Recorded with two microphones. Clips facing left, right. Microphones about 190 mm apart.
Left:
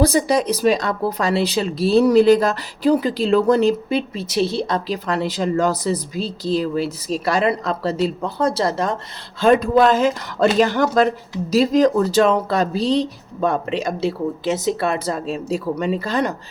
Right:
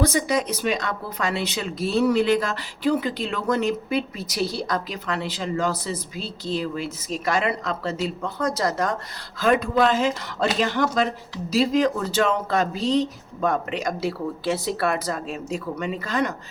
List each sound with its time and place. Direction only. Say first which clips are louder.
0.0 s speech: left 5 dB; 35° left (ahead or behind)